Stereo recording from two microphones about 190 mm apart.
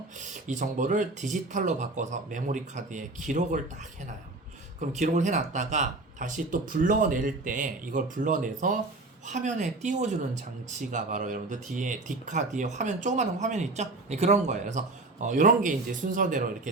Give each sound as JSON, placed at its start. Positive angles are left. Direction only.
{"t": 0.3, "sound": "speech", "side_deg": -40}
{"t": 4.8, "sound": "speech", "side_deg": -40}